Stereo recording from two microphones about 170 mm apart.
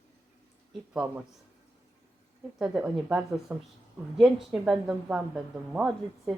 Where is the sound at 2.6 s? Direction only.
5° right (ahead or behind).